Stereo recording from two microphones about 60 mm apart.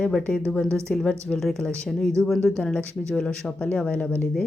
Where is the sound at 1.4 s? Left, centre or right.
Centre.